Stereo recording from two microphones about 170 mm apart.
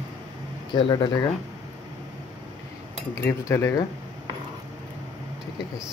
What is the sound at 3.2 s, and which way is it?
Cutlery, 15° left (ahead or behind).